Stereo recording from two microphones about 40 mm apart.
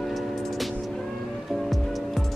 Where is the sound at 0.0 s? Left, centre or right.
Centre.